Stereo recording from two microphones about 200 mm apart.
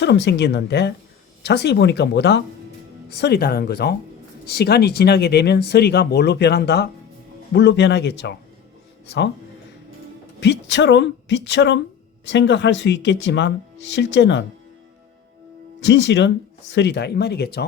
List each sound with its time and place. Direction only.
0.0 s speech: 60° left (ahead or behind)
10.4 s speech: 60° left (ahead or behind)
15.8 s speech: 60° left (ahead or behind)